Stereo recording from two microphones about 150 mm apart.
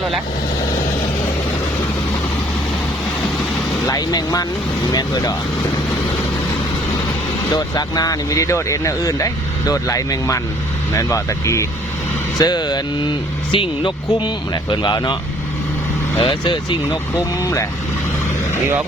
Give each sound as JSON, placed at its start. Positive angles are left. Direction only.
{"t": 3.8, "sound": "speech", "side_deg": 25}
{"t": 7.5, "sound": "speech", "side_deg": 25}
{"t": 16.2, "sound": "speech", "side_deg": 30}
{"t": 16.9, "sound": "speech", "side_deg": 20}